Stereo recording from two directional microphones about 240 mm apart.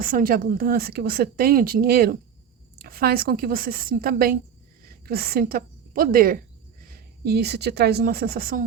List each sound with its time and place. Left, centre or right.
0.0 s a woman's voice: right